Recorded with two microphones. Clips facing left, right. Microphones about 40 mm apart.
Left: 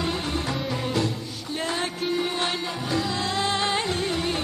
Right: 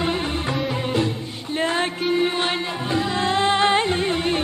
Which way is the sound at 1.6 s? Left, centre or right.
Right.